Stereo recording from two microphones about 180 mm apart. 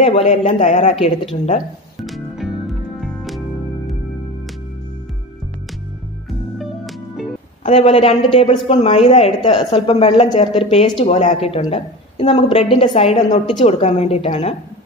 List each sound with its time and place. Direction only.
0.0 s a woman's voice: 35° left (ahead or behind)
2.0 s music: centre (ahead or behind)
7.6 s a woman's voice: 35° left (ahead or behind)